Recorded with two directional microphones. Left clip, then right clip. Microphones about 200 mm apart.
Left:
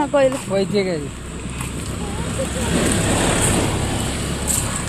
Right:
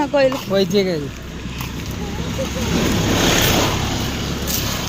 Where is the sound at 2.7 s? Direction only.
30° right (ahead or behind).